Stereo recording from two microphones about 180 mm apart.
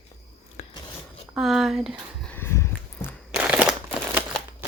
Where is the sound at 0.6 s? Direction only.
40° left (ahead or behind).